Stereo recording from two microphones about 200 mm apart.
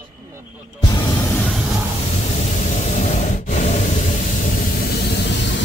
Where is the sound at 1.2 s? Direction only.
10° left (ahead or behind).